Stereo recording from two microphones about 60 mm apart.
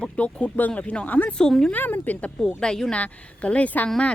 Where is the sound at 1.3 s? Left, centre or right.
Centre.